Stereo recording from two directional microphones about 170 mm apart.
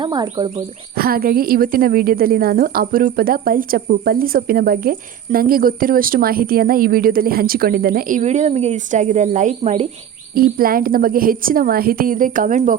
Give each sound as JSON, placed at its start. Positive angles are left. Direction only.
{"t": 0.0, "sound": "speech", "side_deg": -25}
{"t": 0.9, "sound": "a woman's voice", "side_deg": -60}
{"t": 10.3, "sound": "a woman's voice", "side_deg": -60}